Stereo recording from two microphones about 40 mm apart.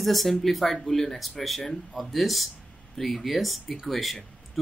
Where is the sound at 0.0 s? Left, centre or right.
Centre.